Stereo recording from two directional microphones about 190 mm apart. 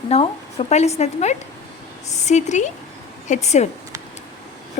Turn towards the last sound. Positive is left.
turn(degrees=35)  # may be behind; listen again after turning